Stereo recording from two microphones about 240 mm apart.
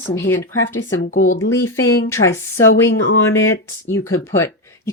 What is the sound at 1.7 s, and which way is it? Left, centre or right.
Speech, centre.